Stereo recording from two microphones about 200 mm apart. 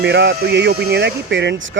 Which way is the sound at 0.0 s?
55° right (ahead or behind).